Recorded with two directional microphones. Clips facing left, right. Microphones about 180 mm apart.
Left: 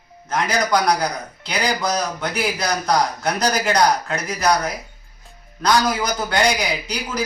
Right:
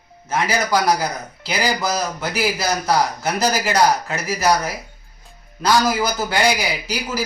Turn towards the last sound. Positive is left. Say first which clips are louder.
# right 1 dB
turn(degrees=-5)  # may be behind; listen again after turning